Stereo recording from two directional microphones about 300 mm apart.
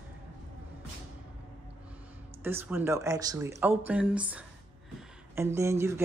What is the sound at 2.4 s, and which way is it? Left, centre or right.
Speech, centre.